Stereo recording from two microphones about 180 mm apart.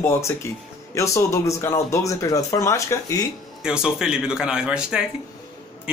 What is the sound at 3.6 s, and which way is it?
Speech, 5° right (ahead or behind).